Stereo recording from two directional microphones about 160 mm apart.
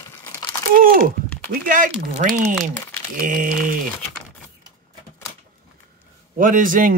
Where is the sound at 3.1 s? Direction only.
60° right (ahead or behind).